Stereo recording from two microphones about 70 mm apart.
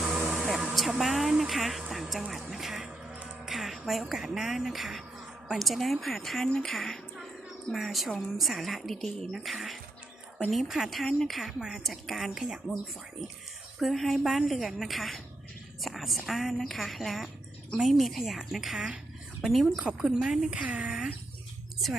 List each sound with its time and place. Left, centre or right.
0.0 s music: centre
1.9 s a woman's voice: centre
3.4 s music: centre
4.1 s a woman's voice: centre
20.5 s speech: centre